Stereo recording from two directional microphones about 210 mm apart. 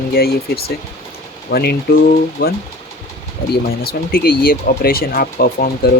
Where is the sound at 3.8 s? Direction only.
45° left (ahead or behind).